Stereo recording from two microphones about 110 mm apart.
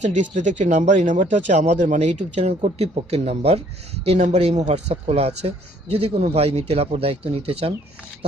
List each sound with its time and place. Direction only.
0.0 s a man's voice: 90° right; by 3.6 s 70° right (ahead or behind)
4.0 s a man's voice: 80° right; by 7.7 s 60° right (ahead or behind)